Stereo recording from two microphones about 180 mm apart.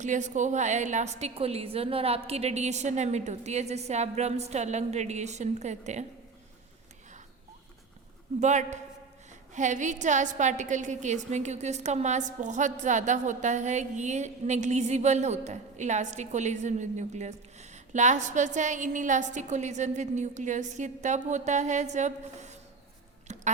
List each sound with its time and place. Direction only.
0.0 s a woman's voice: 40° right (ahead or behind)
8.4 s a woman's voice: 40° right (ahead or behind)
23.3 s a sound: 40° right (ahead or behind)